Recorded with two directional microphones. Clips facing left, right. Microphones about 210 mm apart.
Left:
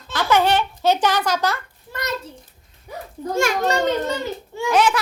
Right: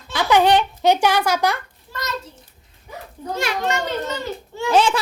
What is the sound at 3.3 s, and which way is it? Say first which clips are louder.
Speech: left 3 dB; 45° left (ahead or behind).